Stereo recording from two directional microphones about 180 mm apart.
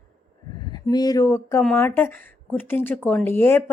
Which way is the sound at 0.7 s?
20° left (ahead or behind).